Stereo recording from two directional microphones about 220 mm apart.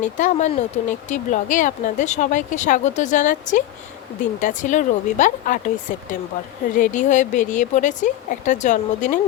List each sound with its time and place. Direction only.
0.0 s speech: 35° left (ahead or behind)
6.7 s speech: 35° left (ahead or behind)